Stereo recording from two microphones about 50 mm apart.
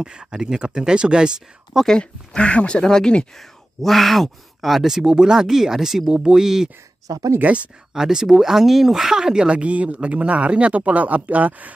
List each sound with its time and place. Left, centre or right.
0.0 s speech: centre
1.9 s speech: centre
3.3 s speech: centre
7.3 s speech: right
7.9 s speech: centre
9.6 s speech: right